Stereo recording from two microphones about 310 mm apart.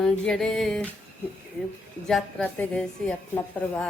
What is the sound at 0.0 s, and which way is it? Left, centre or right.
Speech, centre.